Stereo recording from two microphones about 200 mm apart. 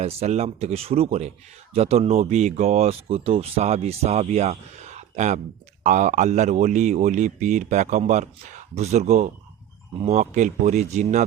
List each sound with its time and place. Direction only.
0.0 s speech: 30° right (ahead or behind)